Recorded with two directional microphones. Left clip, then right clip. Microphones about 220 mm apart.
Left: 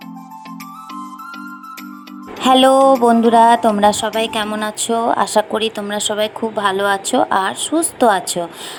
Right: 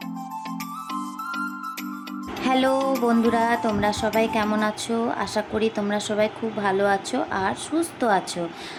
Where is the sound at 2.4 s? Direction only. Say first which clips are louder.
Left 11 dB; 30° left (ahead or behind).